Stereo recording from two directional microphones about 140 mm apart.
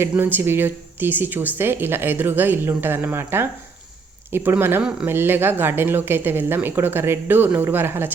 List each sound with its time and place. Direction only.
0.0 s speech: 15° right (ahead or behind)